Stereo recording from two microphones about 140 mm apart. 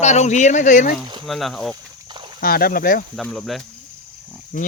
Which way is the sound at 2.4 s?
90° left.